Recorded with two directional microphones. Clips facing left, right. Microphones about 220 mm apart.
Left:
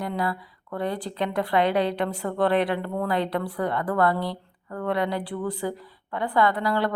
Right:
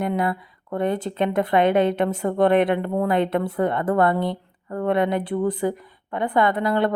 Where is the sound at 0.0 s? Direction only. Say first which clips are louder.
Right 5 dB; 20° right (ahead or behind).